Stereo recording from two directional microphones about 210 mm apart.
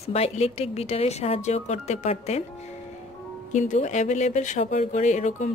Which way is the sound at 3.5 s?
35° left (ahead or behind).